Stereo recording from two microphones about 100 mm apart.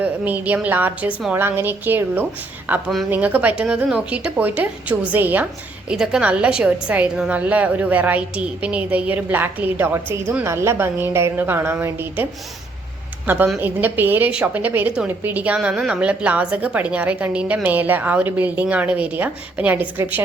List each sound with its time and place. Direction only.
0.0 s a woman's voice: 15° right (ahead or behind)
5.9 s a woman's voice: 5° right (ahead or behind)